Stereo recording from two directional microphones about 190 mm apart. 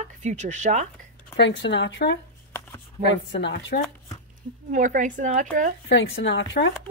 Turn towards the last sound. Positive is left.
turn(degrees=75)  # may be behind; listen again after turning